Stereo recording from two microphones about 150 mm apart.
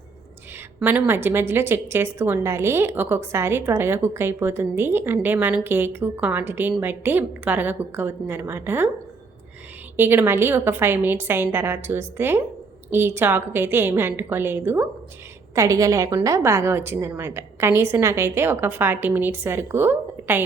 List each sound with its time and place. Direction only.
0.8 s a woman's voice: 10° right (ahead or behind)
10.0 s a woman's voice: 15° right (ahead or behind)